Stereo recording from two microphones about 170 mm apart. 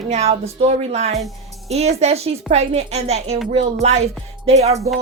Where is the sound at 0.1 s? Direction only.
40° right (ahead or behind).